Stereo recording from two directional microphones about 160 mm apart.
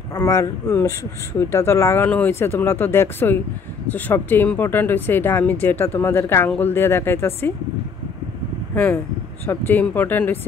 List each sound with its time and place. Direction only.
0.1 s speech: 20° left (ahead or behind)
9.5 s speech: 10° left (ahead or behind)